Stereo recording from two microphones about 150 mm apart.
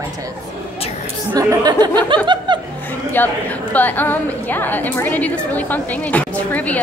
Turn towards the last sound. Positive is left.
turn(degrees=10)  # may be behind; listen again after turning